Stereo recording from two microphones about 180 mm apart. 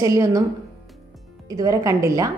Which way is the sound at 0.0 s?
20° right (ahead or behind).